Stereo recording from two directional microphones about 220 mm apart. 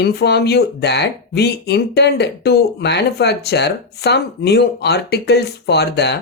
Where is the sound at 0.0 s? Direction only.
50° left (ahead or behind).